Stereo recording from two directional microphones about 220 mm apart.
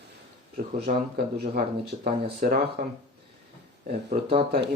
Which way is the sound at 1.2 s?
45° right (ahead or behind).